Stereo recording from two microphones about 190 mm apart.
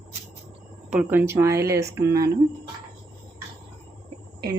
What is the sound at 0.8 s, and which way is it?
Speech, 10° right (ahead or behind).